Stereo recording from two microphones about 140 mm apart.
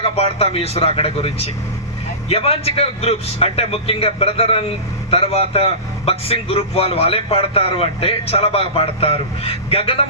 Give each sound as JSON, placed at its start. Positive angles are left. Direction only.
{"t": 0.0, "sound": "a man's voice", "side_deg": 45}